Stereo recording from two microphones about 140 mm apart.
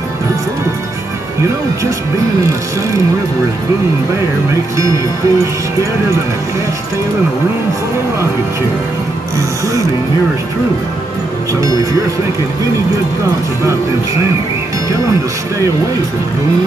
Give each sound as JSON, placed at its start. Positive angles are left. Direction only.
{"t": 4.7, "sound": "speech", "side_deg": -25}